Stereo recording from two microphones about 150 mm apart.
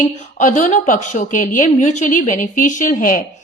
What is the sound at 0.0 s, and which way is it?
A woman's voice, 55° left (ahead or behind).